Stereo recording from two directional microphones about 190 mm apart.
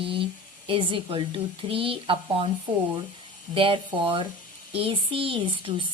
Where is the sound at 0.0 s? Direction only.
25° right (ahead or behind).